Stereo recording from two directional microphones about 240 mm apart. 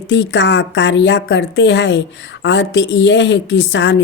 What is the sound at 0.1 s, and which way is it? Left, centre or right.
A woman's voice, left.